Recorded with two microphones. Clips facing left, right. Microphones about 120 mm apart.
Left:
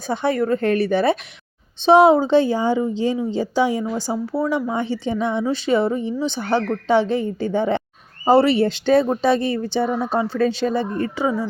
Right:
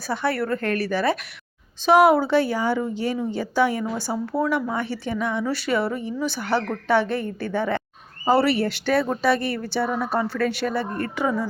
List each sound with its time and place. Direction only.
0.1 s speech: 20° left (ahead or behind)